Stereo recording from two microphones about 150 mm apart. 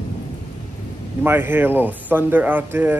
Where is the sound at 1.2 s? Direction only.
15° right (ahead or behind).